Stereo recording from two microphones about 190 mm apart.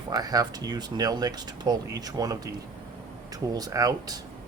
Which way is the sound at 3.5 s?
20° right (ahead or behind).